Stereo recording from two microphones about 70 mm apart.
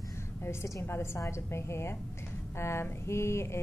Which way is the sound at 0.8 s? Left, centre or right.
Left.